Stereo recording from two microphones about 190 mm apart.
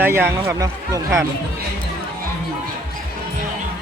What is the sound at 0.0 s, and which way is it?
Speech, 10° right (ahead or behind).